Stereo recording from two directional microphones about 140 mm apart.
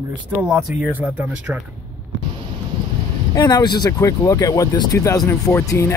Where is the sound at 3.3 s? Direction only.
25° left (ahead or behind).